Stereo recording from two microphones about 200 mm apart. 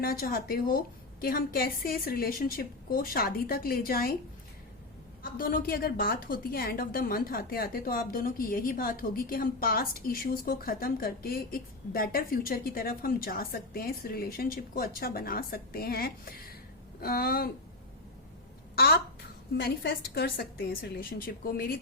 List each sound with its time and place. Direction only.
0.0 s a woman's voice: 45° left (ahead or behind)
5.2 s a woman's voice: 45° left (ahead or behind)
19.5 s a woman's voice: 55° left (ahead or behind)